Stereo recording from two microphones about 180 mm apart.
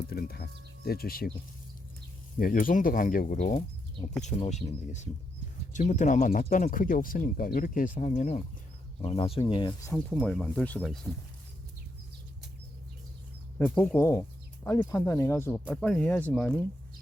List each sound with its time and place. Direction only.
0.1 s speech: 60° left (ahead or behind)
2.4 s speech: 50° left (ahead or behind); by 9.7 s 25° left (ahead or behind)
10.2 s speech: 5° left (ahead or behind)
13.6 s speech: 10° left (ahead or behind)